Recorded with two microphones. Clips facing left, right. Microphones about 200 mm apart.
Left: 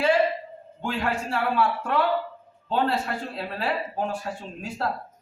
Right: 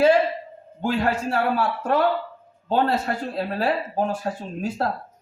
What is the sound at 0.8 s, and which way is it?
A man's voice, 40° right (ahead or behind).